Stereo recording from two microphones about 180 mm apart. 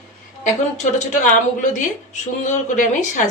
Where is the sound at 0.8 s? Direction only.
45° left (ahead or behind).